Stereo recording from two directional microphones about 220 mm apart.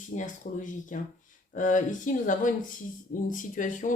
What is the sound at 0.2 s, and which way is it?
Speech, 35° left (ahead or behind).